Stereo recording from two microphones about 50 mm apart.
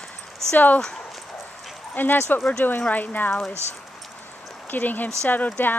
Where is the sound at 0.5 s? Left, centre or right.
Left.